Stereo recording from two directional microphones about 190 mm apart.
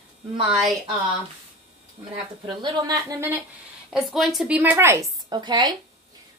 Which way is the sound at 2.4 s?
20° right (ahead or behind).